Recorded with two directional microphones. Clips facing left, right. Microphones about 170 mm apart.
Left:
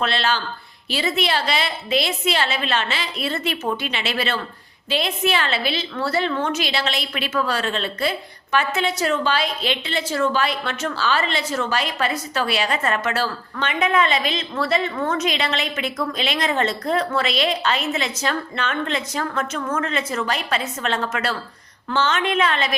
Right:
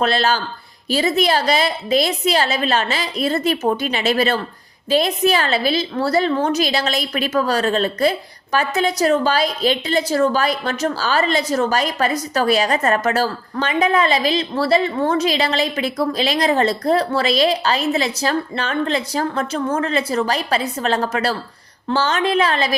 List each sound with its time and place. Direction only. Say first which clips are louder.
0.0 s a woman's voice: right 4 dB; 40° right (ahead or behind)